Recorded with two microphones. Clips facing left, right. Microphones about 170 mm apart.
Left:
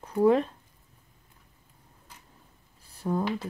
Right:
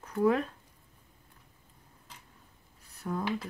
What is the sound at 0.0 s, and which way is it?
Speech, 30° left (ahead or behind).